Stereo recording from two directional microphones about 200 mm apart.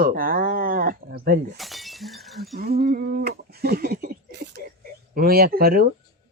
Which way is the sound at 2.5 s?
50° right (ahead or behind).